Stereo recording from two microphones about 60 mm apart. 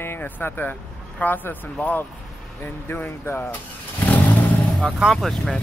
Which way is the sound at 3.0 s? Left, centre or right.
Left.